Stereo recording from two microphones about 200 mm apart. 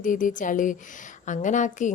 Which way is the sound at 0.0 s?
40° left (ahead or behind).